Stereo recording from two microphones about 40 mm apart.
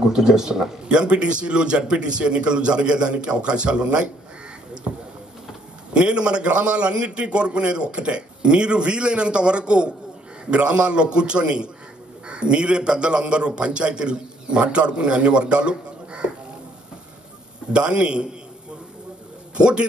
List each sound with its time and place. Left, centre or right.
0.1 s speech: centre
0.8 s a man's voice: right
4.9 s speech: right
5.9 s a man's voice: right
17.7 s a man's voice: right
19.5 s a man's voice: right